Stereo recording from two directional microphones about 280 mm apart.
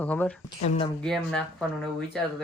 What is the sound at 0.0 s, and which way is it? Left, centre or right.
Speech, centre.